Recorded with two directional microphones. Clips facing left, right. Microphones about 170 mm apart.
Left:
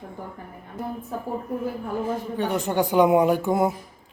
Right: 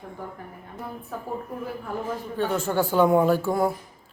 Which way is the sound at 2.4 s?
15° left (ahead or behind).